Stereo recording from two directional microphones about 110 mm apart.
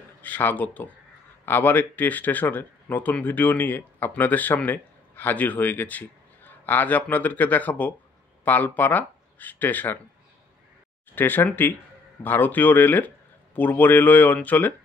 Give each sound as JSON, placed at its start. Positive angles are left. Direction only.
{"t": 0.2, "sound": "speech", "side_deg": 15}
{"t": 11.1, "sound": "speech", "side_deg": 20}